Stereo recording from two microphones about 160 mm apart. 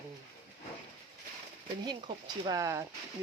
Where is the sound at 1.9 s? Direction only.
30° right (ahead or behind).